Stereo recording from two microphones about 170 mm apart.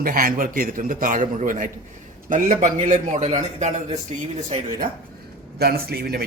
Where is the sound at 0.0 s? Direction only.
55° right (ahead or behind).